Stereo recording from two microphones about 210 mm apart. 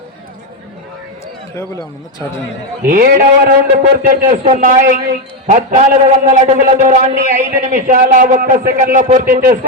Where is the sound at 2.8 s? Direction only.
40° right (ahead or behind).